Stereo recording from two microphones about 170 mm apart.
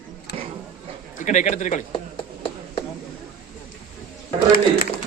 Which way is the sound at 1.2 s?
45° left (ahead or behind).